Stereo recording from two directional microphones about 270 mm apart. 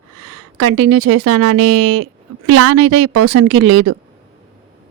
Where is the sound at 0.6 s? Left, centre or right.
Right.